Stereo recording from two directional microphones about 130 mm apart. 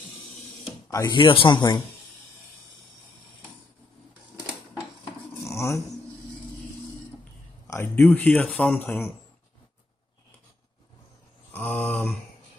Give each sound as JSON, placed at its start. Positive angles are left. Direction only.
{"t": 0.8, "sound": "speech", "side_deg": 25}
{"t": 1.1, "sound": "speech", "side_deg": 40}
{"t": 5.4, "sound": "dog", "side_deg": 20}
{"t": 7.6, "sound": "speech", "side_deg": 20}
{"t": 11.5, "sound": "a sound", "side_deg": 15}